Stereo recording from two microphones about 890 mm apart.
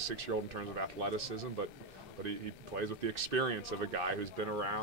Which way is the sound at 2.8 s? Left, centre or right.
Right.